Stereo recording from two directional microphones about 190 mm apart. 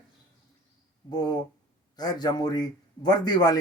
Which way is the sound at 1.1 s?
20° left (ahead or behind).